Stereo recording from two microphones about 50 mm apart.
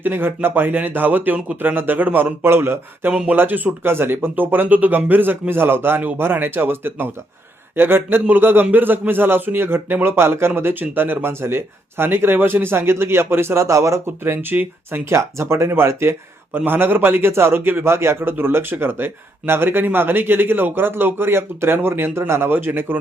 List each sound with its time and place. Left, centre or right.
0.0 s speech: right
3.1 s speech: right
3.3 s speech: right
14.5 s speech: right
15.1 s speech: right
16.6 s speech: right
17.9 s speech: right